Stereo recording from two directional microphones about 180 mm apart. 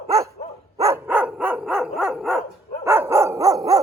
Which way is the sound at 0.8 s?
15° right (ahead or behind).